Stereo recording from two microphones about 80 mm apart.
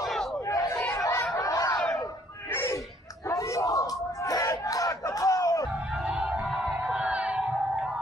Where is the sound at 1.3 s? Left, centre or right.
Left.